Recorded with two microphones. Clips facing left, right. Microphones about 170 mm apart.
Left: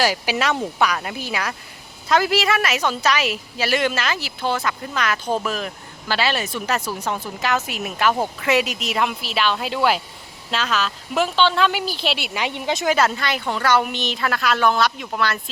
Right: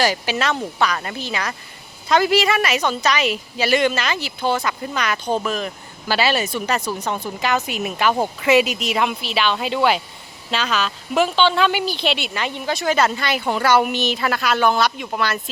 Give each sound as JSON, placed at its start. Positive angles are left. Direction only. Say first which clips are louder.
{"t": 0.0, "sound": "a woman's voice", "louder": "right 1 dB", "side_deg": 5}
{"t": 12.8, "sound": "speech", "louder": "even", "side_deg": 5}
{"t": 13.1, "sound": "a woman's voice", "louder": "right 2 dB", "side_deg": -5}
{"t": 13.4, "sound": "a woman's voice", "louder": "right 3 dB", "side_deg": -15}